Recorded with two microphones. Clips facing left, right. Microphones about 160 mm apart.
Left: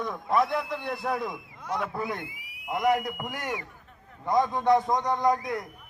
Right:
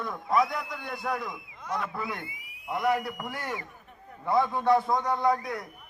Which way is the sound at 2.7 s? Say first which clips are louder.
Left 2 dB; 15° left (ahead or behind).